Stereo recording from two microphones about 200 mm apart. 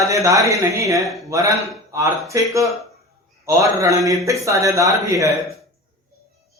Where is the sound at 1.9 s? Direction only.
15° right (ahead or behind).